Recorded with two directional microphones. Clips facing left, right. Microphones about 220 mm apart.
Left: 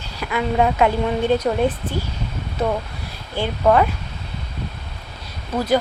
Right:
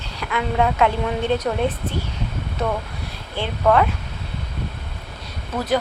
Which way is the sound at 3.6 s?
10° left (ahead or behind).